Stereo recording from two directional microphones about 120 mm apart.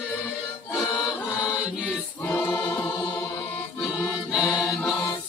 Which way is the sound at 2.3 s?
15° left (ahead or behind).